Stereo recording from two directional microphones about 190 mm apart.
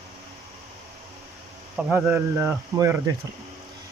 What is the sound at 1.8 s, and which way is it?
Speech, 5° right (ahead or behind).